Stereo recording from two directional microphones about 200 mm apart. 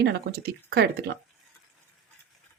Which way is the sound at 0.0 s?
55° right (ahead or behind).